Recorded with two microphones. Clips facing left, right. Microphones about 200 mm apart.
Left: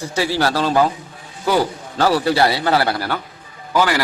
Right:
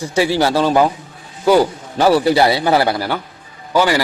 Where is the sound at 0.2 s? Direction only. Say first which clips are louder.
Right 4 dB; 20° right (ahead or behind).